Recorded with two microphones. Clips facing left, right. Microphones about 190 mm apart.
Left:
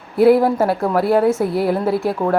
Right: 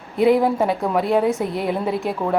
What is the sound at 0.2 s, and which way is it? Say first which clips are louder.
A woman's voice: left 4 dB; 5° left (ahead or behind).